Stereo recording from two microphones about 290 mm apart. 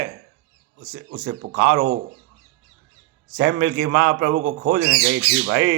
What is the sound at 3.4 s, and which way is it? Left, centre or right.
A man's voice, right.